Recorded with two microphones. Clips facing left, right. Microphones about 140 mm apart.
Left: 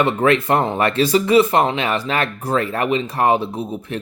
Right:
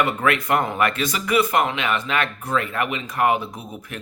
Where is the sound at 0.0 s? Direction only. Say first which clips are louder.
Left 5 dB; 30° left (ahead or behind).